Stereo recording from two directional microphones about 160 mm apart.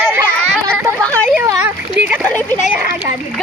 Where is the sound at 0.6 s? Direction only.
5° left (ahead or behind).